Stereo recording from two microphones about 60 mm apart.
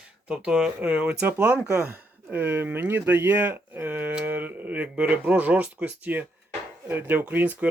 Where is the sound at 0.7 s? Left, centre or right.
Right.